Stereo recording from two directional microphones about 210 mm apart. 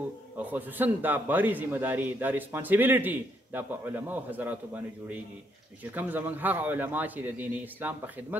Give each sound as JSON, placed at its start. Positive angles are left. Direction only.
{"t": 0.4, "sound": "a man's voice", "side_deg": -10}